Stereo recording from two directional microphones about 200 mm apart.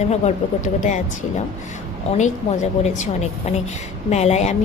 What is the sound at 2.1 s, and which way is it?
Speech, 35° left (ahead or behind).